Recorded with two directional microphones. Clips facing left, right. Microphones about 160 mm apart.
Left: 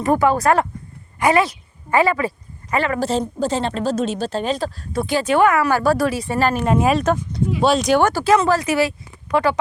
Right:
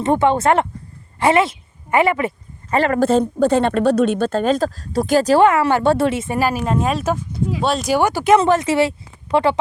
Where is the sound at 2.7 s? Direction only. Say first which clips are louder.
Right 5 dB; 45° right (ahead or behind); by 6.7 s 10° right (ahead or behind).